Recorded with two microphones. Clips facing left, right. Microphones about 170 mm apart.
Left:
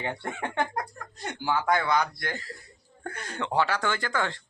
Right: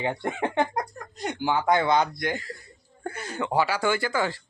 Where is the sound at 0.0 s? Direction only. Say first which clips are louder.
Right 5 dB; 15° right (ahead or behind).